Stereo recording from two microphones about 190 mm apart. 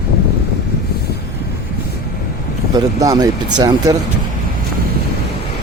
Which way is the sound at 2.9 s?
20° right (ahead or behind).